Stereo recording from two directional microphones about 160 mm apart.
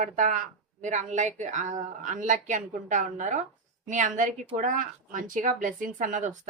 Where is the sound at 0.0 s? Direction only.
55° right (ahead or behind).